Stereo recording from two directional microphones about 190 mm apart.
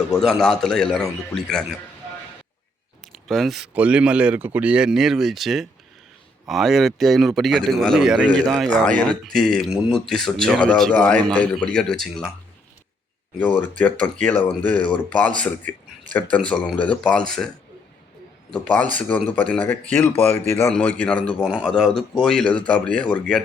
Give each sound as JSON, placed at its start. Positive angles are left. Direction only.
{"t": 0.1, "sound": "speech", "side_deg": 0}
{"t": 3.0, "sound": "speech", "side_deg": 0}
{"t": 13.4, "sound": "speech", "side_deg": 10}
{"t": 16.5, "sound": "speech", "side_deg": 5}
{"t": 18.5, "sound": "speech", "side_deg": 10}